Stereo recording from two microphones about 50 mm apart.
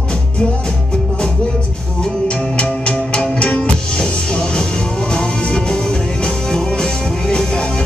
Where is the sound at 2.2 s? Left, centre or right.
Left.